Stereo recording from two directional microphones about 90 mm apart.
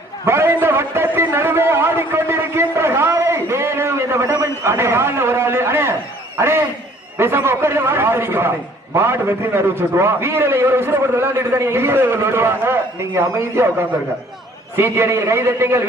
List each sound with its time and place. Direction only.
0.3 s a man's voice: 25° right (ahead or behind)